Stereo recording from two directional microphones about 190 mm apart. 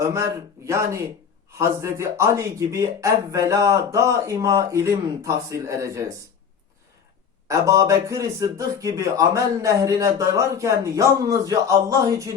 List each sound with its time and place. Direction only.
0.0 s a man's voice: 15° right (ahead or behind)
7.4 s a man's voice: 15° right (ahead or behind)